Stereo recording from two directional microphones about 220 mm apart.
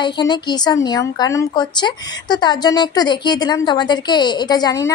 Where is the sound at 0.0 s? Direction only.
20° left (ahead or behind).